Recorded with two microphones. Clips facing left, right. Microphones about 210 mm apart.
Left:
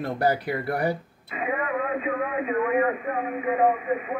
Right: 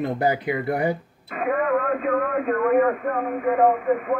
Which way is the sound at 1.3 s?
50° right (ahead or behind).